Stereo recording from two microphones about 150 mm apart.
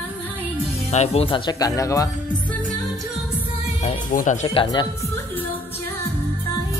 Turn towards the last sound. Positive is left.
turn(degrees=30)  # may be behind; listen again after turning